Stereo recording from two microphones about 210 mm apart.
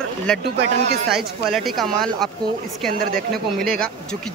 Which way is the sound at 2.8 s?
45° right (ahead or behind).